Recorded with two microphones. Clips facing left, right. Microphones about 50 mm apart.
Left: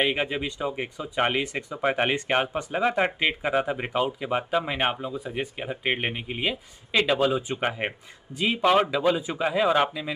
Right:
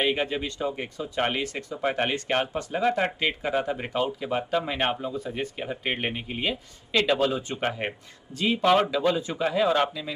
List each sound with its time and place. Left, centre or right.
0.0 s speech: centre